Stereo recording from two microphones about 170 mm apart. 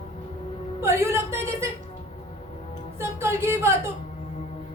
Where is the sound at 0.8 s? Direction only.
15° right (ahead or behind).